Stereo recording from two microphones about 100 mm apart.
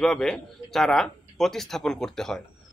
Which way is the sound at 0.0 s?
5° left (ahead or behind).